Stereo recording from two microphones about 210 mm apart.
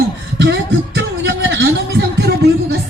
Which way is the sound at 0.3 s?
55° right (ahead or behind).